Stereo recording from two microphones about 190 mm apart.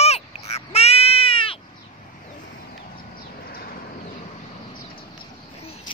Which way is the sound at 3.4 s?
50° left (ahead or behind).